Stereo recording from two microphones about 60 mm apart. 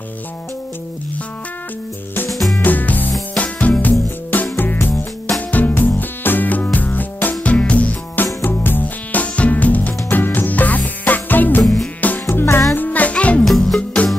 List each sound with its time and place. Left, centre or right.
2.3 s music: centre
2.6 s music: left
11.6 s music: centre
12.3 s music: left
12.7 s music: left
13.4 s music: centre